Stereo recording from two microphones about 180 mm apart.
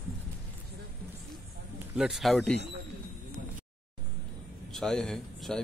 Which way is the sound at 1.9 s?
Centre (ahead or behind).